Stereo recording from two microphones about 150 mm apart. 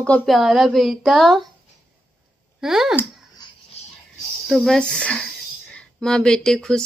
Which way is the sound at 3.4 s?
30° left (ahead or behind).